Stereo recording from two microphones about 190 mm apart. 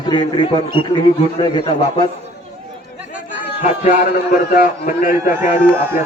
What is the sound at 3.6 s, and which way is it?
Speech, 40° left (ahead or behind).